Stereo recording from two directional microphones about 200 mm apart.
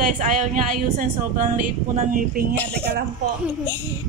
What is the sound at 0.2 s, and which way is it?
A woman's voice, 40° right (ahead or behind).